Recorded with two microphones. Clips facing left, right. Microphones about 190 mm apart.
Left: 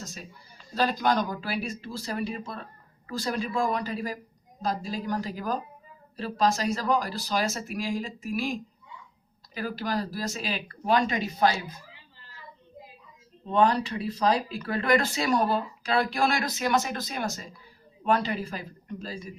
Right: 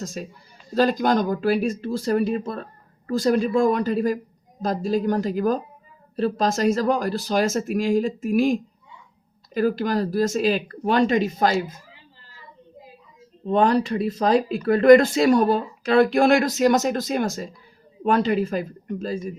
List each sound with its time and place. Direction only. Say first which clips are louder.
0.7 s speech: right 6 dB; 50° right (ahead or behind)
9.6 s speech: right 9 dB; 50° right (ahead or behind)
13.5 s speech: right 4 dB; 45° right (ahead or behind)
18.5 s speech: right 10 dB; 45° right (ahead or behind)